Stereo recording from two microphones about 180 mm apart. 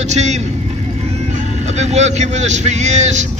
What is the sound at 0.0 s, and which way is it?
Speech, 40° right (ahead or behind).